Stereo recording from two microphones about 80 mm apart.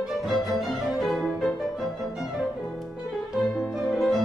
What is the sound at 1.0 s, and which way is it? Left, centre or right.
Music, centre.